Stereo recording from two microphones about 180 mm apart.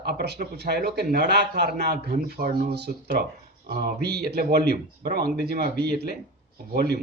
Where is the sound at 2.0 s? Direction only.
45° right (ahead or behind).